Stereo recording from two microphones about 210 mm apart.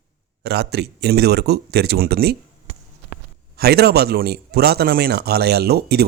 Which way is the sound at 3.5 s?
50° right (ahead or behind).